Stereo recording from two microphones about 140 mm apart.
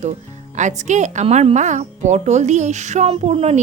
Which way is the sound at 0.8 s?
60° right (ahead or behind).